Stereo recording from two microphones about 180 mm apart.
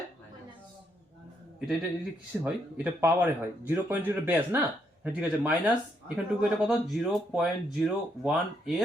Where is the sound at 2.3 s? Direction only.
5° right (ahead or behind).